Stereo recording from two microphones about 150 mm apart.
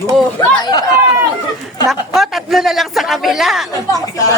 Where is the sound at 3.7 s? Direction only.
25° left (ahead or behind).